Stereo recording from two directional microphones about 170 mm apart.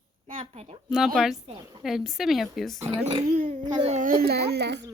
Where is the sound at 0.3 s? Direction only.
35° right (ahead or behind).